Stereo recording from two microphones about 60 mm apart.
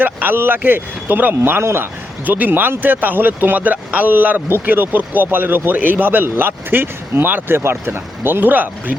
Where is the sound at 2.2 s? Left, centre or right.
Right.